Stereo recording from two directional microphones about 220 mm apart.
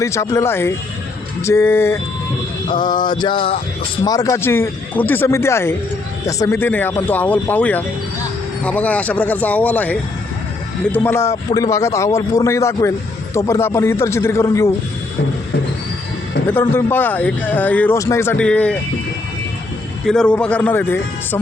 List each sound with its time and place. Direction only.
0.0 s speech: 15° left (ahead or behind)
3.1 s a sound: 20° left (ahead or behind)
4.0 s speech: 15° left (ahead or behind)
16.5 s speech: 10° left (ahead or behind)
20.1 s a man's voice: 5° left (ahead or behind)